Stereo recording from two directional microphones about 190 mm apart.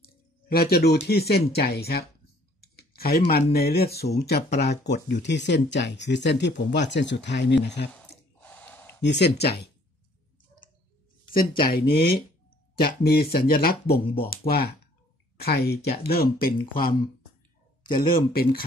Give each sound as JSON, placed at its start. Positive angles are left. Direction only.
{"t": 0.0, "sound": "a sound", "side_deg": 55}
{"t": 1.0, "sound": "speech", "side_deg": 55}
{"t": 2.6, "sound": "a sound", "side_deg": 55}
{"t": 3.5, "sound": "speech", "side_deg": 55}
{"t": 7.9, "sound": "a sound", "side_deg": 5}
{"t": 9.0, "sound": "speech", "side_deg": 65}
{"t": 11.3, "sound": "speech", "side_deg": 50}
{"t": 13.8, "sound": "speech", "side_deg": 30}
{"t": 15.3, "sound": "speech", "side_deg": 55}
{"t": 18.1, "sound": "speech", "side_deg": 50}